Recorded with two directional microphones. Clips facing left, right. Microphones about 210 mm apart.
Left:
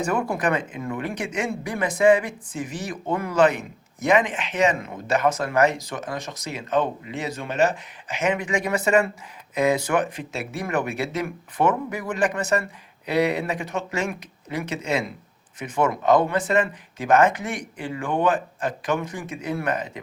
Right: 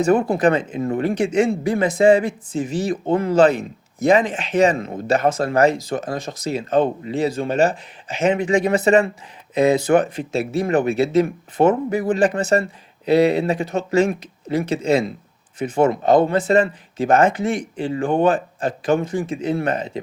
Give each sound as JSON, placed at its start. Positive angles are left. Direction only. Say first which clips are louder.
{"t": 0.0, "sound": "speech", "louder": "right 8 dB", "side_deg": -30}